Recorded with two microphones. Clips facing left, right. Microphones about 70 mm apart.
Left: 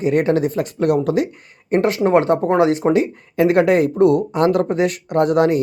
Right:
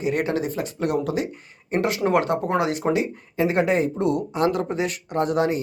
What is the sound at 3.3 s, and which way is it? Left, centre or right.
Speech, left.